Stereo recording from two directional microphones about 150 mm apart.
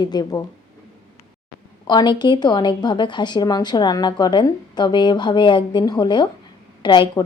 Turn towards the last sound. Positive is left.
turn(degrees=30)  # may be behind; listen again after turning